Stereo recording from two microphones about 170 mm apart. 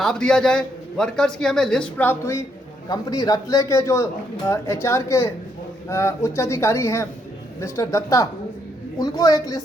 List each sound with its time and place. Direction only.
0.0 s a man's voice: 5° left (ahead or behind); by 9.6 s 20° left (ahead or behind)